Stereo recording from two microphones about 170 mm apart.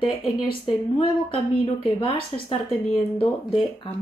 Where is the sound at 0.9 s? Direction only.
35° left (ahead or behind).